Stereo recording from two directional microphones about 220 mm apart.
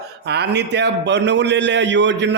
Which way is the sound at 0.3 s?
50° right (ahead or behind).